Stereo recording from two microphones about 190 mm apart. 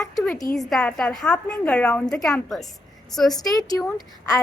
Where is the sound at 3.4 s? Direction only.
20° left (ahead or behind).